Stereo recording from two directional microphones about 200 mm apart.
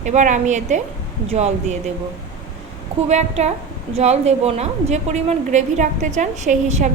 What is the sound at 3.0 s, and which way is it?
A woman's voice, 35° right (ahead or behind).